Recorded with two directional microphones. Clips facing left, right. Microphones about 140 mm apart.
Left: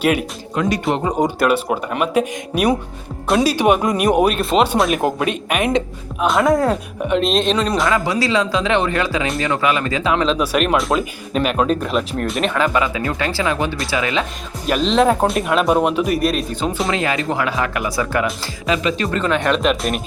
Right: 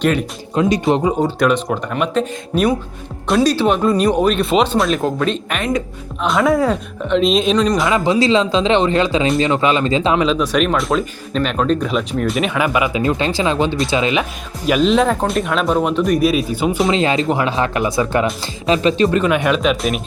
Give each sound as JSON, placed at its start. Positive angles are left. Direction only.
{"t": 0.0, "sound": "speech", "side_deg": 5}
{"t": 0.5, "sound": "speech", "side_deg": -25}
{"t": 1.4, "sound": "speech", "side_deg": 5}
{"t": 3.5, "sound": "speech", "side_deg": 15}
{"t": 4.4, "sound": "speech", "side_deg": 0}
{"t": 4.9, "sound": "speech", "side_deg": 15}
{"t": 6.1, "sound": "speech", "side_deg": 0}
{"t": 7.9, "sound": "speech", "side_deg": -25}
{"t": 10.3, "sound": "speech", "side_deg": 5}
{"t": 14.8, "sound": "speech", "side_deg": 0}
{"t": 16.9, "sound": "speech", "side_deg": -25}
{"t": 19.2, "sound": "speech", "side_deg": -10}